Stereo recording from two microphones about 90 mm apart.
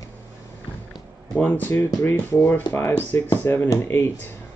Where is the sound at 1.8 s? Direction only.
40° left (ahead or behind).